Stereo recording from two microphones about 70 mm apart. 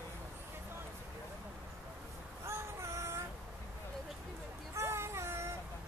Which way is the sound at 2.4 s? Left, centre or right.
Right.